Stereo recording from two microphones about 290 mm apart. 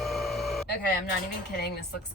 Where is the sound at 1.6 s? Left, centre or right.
Left.